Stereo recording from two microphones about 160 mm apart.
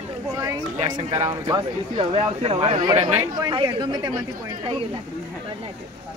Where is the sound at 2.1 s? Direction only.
40° right (ahead or behind).